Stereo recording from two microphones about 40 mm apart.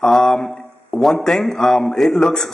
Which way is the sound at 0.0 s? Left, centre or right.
Centre.